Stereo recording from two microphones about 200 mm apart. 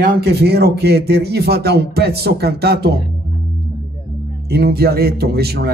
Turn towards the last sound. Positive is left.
turn(degrees=-50)  # may be behind; listen again after turning